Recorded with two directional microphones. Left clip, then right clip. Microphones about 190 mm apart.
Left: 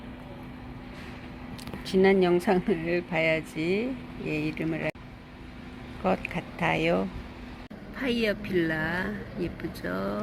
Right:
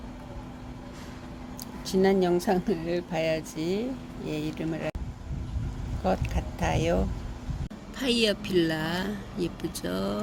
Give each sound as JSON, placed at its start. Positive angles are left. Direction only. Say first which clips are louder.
{"t": 1.9, "sound": "speech", "louder": "left 2 dB", "side_deg": 0}
{"t": 6.0, "sound": "speech", "louder": "left 1 dB", "side_deg": 0}
{"t": 8.2, "sound": "speech", "louder": "right 2 dB", "side_deg": -25}